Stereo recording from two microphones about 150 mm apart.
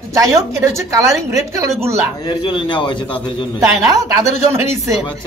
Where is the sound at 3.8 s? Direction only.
20° right (ahead or behind).